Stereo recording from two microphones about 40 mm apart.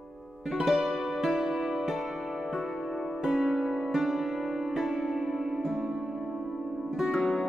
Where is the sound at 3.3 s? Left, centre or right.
Centre.